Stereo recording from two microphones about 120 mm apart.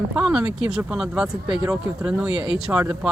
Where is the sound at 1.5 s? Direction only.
30° right (ahead or behind).